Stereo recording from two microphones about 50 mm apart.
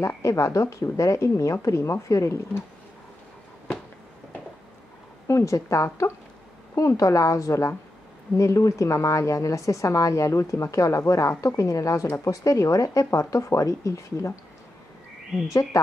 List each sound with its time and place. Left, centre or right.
0.2 s speech: left
5.3 s a woman's voice: left